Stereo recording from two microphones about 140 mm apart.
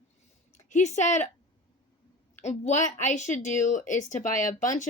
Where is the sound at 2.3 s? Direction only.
55° left (ahead or behind).